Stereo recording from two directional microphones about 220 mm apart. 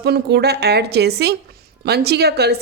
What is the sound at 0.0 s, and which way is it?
Speech, 50° right (ahead or behind).